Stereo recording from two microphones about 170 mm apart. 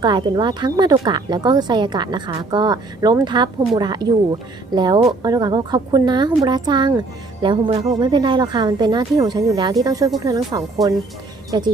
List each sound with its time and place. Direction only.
0.0 s a woman's voice: 25° right (ahead or behind)
10.8 s speech: centre (ahead or behind)
11.5 s a woman's voice: 25° right (ahead or behind)